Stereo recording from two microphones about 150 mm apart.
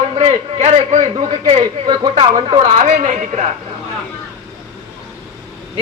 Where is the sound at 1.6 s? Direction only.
30° right (ahead or behind).